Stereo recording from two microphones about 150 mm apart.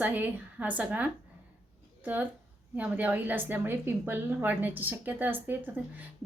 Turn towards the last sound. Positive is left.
turn(degrees=-10)  # may be behind; listen again after turning